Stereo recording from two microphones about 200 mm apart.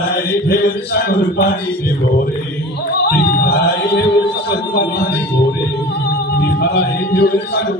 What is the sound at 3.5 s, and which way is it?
Music, 55° left (ahead or behind).